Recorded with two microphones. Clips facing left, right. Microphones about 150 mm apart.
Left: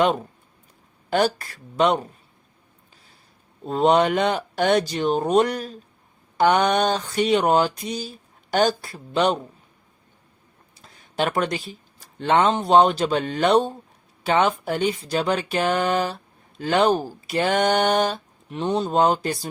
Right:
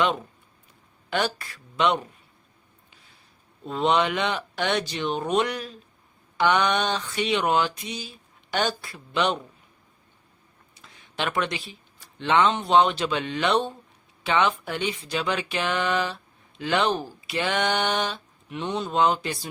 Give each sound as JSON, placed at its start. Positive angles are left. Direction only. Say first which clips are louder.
{"t": 1.1, "sound": "speech", "louder": "left 6 dB", "side_deg": 40}
{"t": 3.6, "sound": "speech", "louder": "left 5 dB", "side_deg": 40}
{"t": 10.8, "sound": "speech", "louder": "left 6 dB", "side_deg": 40}